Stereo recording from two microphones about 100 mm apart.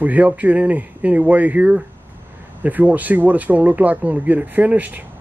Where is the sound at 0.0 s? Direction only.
15° right (ahead or behind).